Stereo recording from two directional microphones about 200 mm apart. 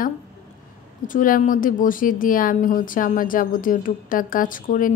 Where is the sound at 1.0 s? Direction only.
40° left (ahead or behind).